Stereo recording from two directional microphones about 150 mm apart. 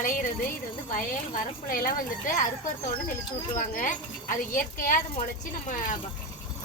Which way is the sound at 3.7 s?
60° left (ahead or behind).